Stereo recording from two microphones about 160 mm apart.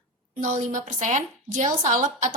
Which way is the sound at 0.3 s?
50° right (ahead or behind).